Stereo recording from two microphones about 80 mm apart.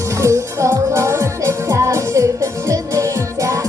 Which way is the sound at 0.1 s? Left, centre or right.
Right.